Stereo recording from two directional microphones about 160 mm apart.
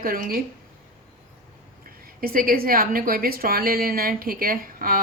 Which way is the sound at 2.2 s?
60° right (ahead or behind).